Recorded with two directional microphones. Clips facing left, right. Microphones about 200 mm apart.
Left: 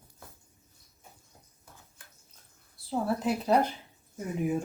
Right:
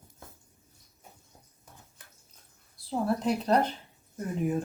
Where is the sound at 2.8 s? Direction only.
5° left (ahead or behind).